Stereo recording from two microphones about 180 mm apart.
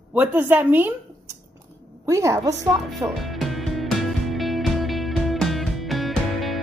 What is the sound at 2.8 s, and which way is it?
Music, centre (ahead or behind).